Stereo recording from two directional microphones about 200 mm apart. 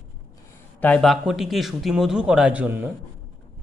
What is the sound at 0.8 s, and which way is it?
A man's voice, 5° left (ahead or behind).